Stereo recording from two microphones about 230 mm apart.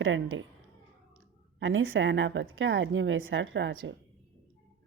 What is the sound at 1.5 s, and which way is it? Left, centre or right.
A woman's voice, right.